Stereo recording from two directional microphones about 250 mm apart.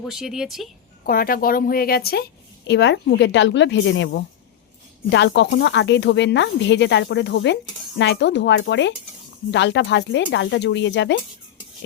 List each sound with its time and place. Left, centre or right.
0.0 s speech: centre
1.0 s a woman's voice: left